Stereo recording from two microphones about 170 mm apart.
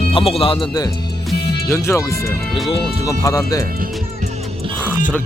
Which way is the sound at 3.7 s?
55° right (ahead or behind).